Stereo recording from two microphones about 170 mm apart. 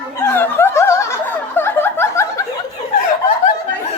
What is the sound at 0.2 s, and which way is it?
Snicker, 10° left (ahead or behind).